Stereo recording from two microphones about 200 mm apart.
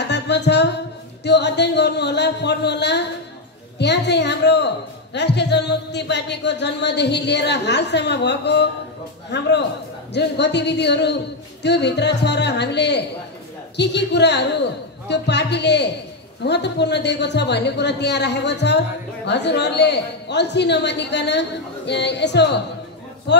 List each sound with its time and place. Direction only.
0.1 s music: 60° left (ahead or behind)
1.2 s a sound: 60° left (ahead or behind)
3.7 s speech: 60° left (ahead or behind)